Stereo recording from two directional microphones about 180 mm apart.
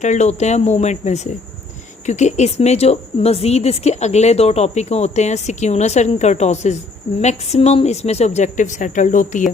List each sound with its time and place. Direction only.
0.0 s a woman's voice: 40° left (ahead or behind)